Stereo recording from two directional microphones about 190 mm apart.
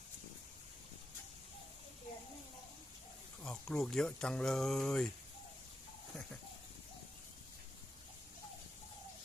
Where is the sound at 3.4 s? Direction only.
5° left (ahead or behind).